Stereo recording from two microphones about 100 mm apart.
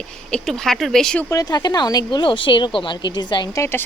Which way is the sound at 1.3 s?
40° left (ahead or behind).